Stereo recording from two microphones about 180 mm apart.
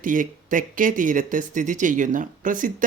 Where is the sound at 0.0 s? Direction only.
50° right (ahead or behind).